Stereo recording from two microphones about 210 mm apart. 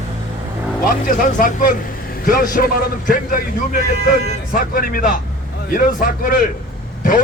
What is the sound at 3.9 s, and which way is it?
Speech, 50° right (ahead or behind).